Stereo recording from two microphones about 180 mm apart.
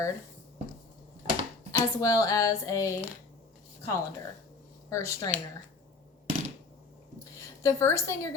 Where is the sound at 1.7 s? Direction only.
20° left (ahead or behind).